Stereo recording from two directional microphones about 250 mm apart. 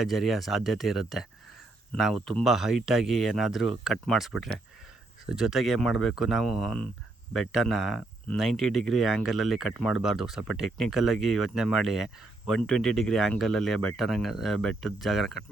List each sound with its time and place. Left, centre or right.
0.0 s speech: centre
6.6 s speech: left
7.3 s speech: centre